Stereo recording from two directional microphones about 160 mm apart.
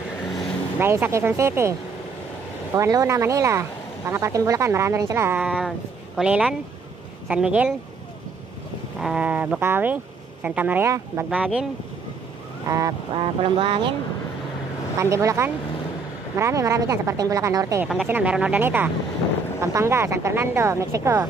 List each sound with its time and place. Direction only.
0.7 s speech: 15° right (ahead or behind)
9.0 s speech: 5° right (ahead or behind)
12.6 s goose: 20° right (ahead or behind)
13.1 s speech: 35° right (ahead or behind)
15.0 s speech: 20° right (ahead or behind)
18.0 s speech: 10° right (ahead or behind)